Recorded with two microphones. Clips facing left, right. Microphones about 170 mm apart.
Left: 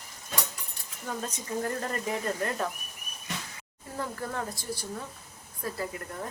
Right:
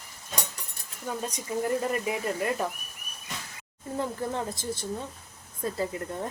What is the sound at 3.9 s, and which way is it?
Speech, 20° right (ahead or behind).